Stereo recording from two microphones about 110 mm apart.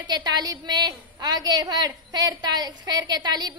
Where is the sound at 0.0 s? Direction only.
40° right (ahead or behind).